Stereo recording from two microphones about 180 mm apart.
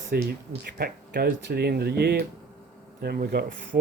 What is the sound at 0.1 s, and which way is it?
Speech, 60° right (ahead or behind).